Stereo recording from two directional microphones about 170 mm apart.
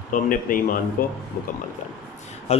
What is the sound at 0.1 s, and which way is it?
Speech, 55° left (ahead or behind).